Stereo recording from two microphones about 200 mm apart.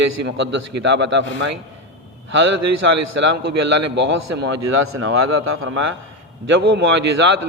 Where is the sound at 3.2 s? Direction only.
65° right (ahead or behind); by 5.7 s 90° right.